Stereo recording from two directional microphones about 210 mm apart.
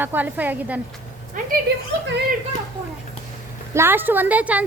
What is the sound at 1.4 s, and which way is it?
Speech, 40° right (ahead or behind).